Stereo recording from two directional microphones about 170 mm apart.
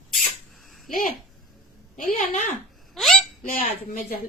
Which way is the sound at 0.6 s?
Centre (ahead or behind).